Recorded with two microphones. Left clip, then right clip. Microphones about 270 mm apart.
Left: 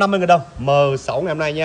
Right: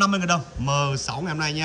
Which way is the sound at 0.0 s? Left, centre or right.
Centre.